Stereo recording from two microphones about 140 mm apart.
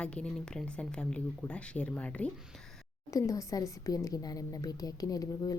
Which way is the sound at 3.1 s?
25° left (ahead or behind).